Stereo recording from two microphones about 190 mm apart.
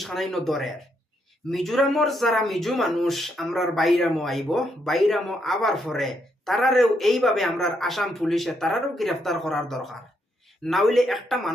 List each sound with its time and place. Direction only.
0.0 s speech: centre (ahead or behind)